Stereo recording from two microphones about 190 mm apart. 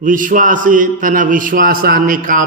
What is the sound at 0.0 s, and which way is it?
A man's voice, 45° right (ahead or behind).